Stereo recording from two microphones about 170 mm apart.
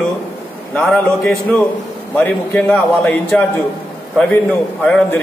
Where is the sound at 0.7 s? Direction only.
5° left (ahead or behind).